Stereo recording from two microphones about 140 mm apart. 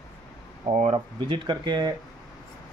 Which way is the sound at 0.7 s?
55° right (ahead or behind).